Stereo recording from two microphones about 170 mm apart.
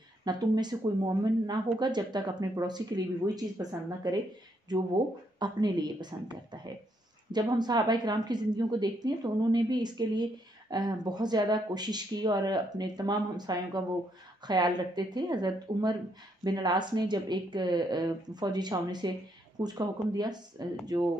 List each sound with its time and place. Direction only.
0.2 s speech: 25° right (ahead or behind)